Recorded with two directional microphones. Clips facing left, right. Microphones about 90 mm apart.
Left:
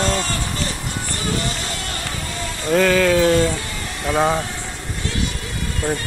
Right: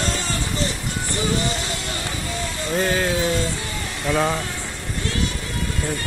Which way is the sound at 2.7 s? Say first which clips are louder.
Left 7 dB; 90° left.